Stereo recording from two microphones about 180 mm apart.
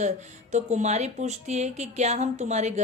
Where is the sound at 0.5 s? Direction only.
40° right (ahead or behind).